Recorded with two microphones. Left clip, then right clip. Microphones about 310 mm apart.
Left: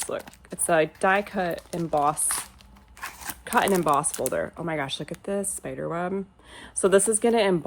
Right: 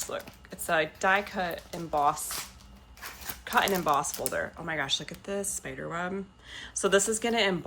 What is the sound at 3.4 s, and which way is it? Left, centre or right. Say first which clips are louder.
Speech: left 4 dB; left.